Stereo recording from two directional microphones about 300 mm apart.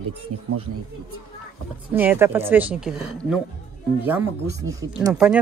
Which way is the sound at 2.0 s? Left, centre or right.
Centre.